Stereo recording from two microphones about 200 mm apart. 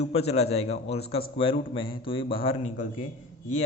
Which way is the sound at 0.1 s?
30° left (ahead or behind).